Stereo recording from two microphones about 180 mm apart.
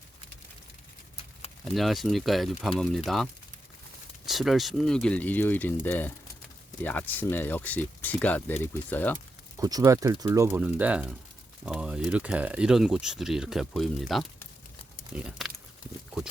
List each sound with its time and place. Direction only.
1.6 s speech: centre (ahead or behind)
4.3 s speech: centre (ahead or behind)
9.6 s speech: 20° right (ahead or behind); by 15.5 s 5° right (ahead or behind)